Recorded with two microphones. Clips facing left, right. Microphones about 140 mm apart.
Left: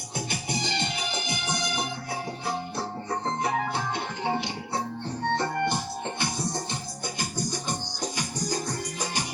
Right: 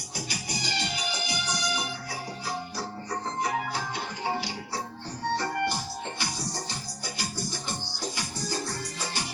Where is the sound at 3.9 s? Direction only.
20° left (ahead or behind).